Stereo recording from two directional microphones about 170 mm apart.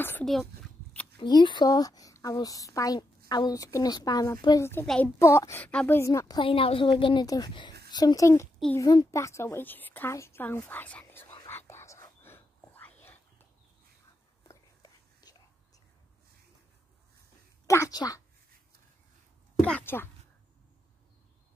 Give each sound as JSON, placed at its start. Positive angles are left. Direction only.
{"t": 0.2, "sound": "a child's voice", "side_deg": 0}
{"t": 1.2, "sound": "a woman's voice", "side_deg": 25}
{"t": 11.4, "sound": "whispering", "side_deg": 15}
{"t": 14.5, "sound": "whispering", "side_deg": 20}
{"t": 17.6, "sound": "a woman's voice", "side_deg": 20}
{"t": 19.6, "sound": "a woman's voice", "side_deg": 10}